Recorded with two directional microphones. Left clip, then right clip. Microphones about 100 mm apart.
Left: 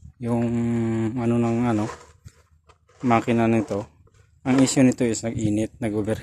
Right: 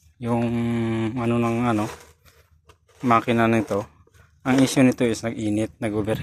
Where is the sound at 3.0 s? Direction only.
25° left (ahead or behind).